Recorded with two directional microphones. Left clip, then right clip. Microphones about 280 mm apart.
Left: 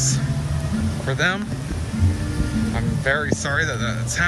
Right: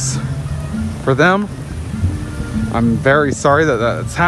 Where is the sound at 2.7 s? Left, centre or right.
Right.